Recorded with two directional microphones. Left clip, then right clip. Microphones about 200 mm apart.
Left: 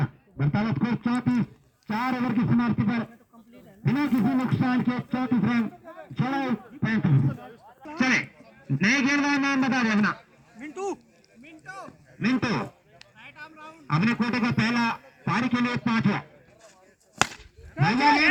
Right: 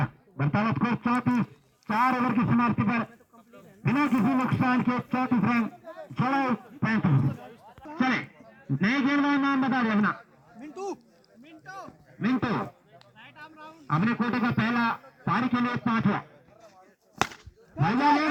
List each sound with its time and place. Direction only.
0.0 s a sound: 40° right (ahead or behind)
1.9 s a man's voice: 40° right (ahead or behind); by 7.8 s 55° right (ahead or behind)
7.9 s a man's voice: 40° right (ahead or behind)
12.2 s speech: 40° right (ahead or behind)
13.1 s a sound: 5° left (ahead or behind)
13.8 s a man's voice: 35° right (ahead or behind)
17.7 s a man's voice: 40° right (ahead or behind)